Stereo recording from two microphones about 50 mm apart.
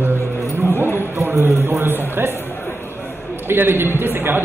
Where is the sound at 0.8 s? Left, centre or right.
Right.